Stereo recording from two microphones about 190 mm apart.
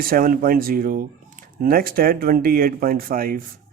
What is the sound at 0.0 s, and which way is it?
Speech, 50° right (ahead or behind).